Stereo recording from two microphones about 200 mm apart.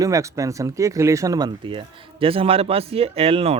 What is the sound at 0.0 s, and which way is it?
Speech, 15° right (ahead or behind).